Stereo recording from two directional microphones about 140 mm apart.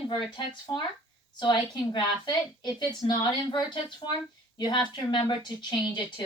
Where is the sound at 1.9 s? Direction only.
30° left (ahead or behind).